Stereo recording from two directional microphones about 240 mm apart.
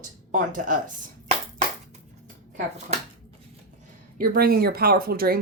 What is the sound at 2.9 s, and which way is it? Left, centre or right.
Speech, right.